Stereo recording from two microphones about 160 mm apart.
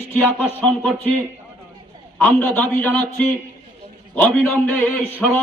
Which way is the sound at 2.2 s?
10° left (ahead or behind).